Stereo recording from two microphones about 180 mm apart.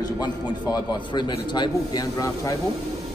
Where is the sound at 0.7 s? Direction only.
25° left (ahead or behind).